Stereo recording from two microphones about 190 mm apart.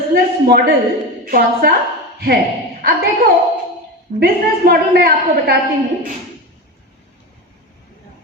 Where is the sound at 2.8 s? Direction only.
55° right (ahead or behind).